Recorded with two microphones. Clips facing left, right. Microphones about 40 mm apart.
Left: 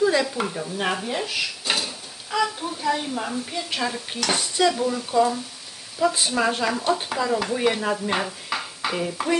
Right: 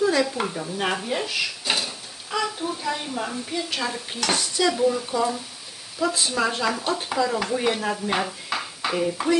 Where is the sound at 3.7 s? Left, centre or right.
Centre.